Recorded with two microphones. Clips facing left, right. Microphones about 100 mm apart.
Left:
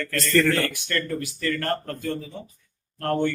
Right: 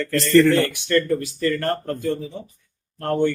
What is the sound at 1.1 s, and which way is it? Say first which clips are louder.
Speech: right 5 dB; 30° right (ahead or behind).